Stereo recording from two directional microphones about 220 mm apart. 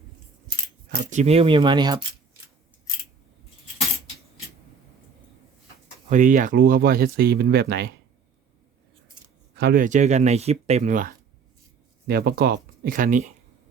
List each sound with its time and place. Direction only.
0.9 s speech: 35° right (ahead or behind); by 2.0 s 20° right (ahead or behind)
6.1 s speech: 35° right (ahead or behind)
9.6 s speech: 40° right (ahead or behind)
12.0 s speech: 45° right (ahead or behind)